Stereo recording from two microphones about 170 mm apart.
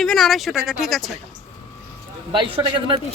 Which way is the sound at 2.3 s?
30° right (ahead or behind).